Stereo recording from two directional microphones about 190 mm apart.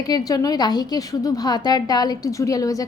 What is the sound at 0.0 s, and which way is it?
A woman's voice, 20° left (ahead or behind).